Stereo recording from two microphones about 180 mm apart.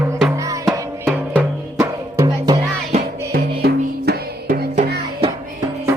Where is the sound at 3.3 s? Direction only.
60° right (ahead or behind).